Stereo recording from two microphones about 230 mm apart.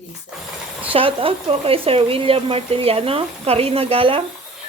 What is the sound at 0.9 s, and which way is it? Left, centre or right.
Speech, right.